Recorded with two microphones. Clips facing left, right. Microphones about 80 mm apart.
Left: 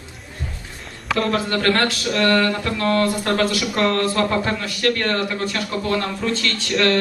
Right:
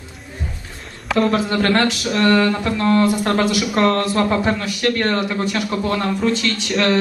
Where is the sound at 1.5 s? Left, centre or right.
Centre.